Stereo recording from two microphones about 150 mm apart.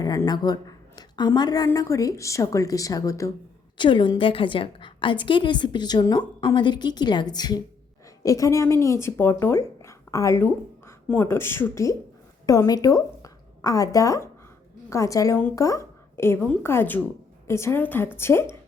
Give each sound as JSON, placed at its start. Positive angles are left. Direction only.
{"t": 0.0, "sound": "a woman's voice", "side_deg": 25}
{"t": 3.8, "sound": "a woman's voice", "side_deg": 30}